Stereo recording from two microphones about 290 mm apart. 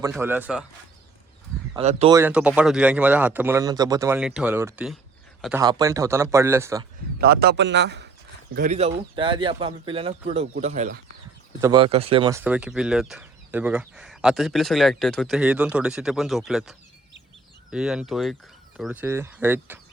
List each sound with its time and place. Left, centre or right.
0.0 s a man's voice: centre
1.7 s speech: right
2.1 s a man's voice: centre
7.2 s a man's voice: right
8.5 s a man's voice: right; by 19.8 s centre